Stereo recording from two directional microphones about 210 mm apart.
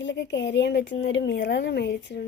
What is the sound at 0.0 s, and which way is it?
Speech, 55° left (ahead or behind).